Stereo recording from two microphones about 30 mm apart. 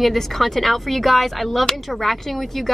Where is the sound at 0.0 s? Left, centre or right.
Centre.